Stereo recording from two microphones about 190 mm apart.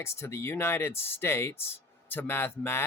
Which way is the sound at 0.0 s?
15° left (ahead or behind).